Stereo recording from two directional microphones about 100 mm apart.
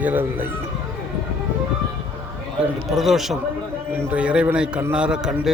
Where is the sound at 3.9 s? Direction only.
20° right (ahead or behind).